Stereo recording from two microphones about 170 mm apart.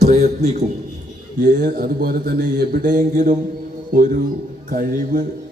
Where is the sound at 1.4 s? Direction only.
55° right (ahead or behind).